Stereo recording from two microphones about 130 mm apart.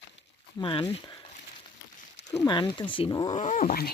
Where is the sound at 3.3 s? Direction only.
65° left (ahead or behind).